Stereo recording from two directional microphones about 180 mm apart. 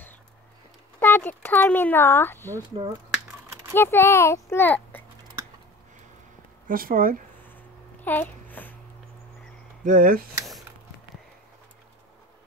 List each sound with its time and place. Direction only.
0.9 s speech: 10° left (ahead or behind)
3.7 s speech: 10° left (ahead or behind)
6.7 s speech: 55° right (ahead or behind)
8.0 s babbling: 10° left (ahead or behind)
9.8 s speech: 50° right (ahead or behind)